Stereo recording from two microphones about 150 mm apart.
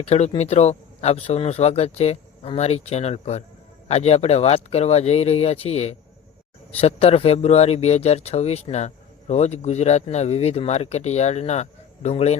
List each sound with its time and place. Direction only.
0.0 s speech: 45° left (ahead or behind)